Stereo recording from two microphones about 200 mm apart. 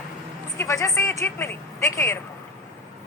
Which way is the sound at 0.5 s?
15° left (ahead or behind).